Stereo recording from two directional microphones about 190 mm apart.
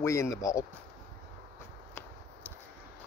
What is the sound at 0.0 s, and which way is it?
Speech, 15° left (ahead or behind).